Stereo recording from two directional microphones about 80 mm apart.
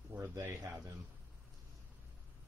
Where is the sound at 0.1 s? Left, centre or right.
Right.